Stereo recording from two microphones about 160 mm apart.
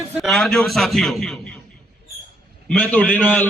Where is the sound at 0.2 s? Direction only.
Centre (ahead or behind).